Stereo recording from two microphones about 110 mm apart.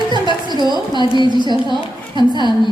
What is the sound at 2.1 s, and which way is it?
Speech, 40° left (ahead or behind).